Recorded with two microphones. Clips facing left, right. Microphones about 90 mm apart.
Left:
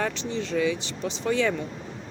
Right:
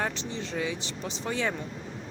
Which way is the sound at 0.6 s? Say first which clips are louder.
Left 7 dB; 25° right (ahead or behind).